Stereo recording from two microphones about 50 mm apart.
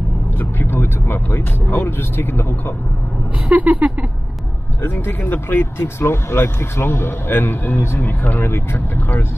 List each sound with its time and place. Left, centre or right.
0.4 s speech: left
3.5 s a sound: right
4.8 s speech: left
8.0 s speech: left